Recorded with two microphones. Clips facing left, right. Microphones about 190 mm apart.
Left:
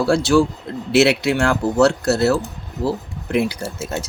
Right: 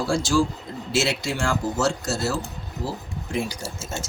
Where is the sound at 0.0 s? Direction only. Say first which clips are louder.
Left 6 dB; 65° left (ahead or behind).